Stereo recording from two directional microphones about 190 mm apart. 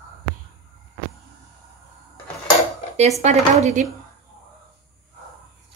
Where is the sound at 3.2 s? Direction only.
35° right (ahead or behind).